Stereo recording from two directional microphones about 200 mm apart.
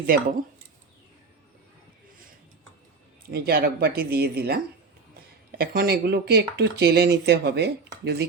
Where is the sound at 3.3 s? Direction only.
50° right (ahead or behind).